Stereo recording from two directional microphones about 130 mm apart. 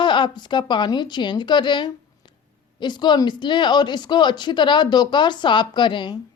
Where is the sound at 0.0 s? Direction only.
35° left (ahead or behind).